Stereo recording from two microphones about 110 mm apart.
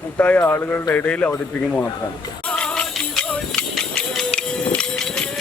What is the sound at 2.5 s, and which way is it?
Music, 10° left (ahead or behind).